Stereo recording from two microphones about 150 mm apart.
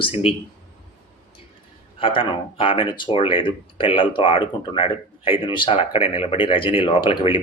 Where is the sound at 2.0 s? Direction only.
35° left (ahead or behind).